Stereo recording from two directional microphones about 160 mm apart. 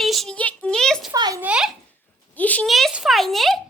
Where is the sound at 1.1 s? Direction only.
25° right (ahead or behind).